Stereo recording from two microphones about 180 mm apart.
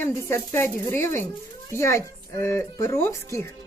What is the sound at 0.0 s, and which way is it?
Speech, 15° left (ahead or behind).